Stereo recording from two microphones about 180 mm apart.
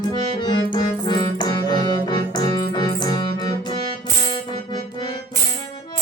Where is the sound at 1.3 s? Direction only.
25° left (ahead or behind).